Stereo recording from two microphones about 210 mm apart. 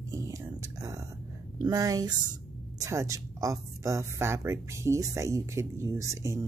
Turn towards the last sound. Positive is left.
turn(degrees=-15)  # may be behind; listen again after turning